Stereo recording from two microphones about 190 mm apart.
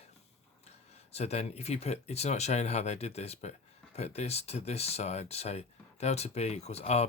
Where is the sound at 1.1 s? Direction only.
35° left (ahead or behind).